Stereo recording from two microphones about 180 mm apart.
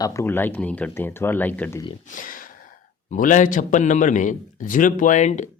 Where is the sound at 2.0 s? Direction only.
50° left (ahead or behind).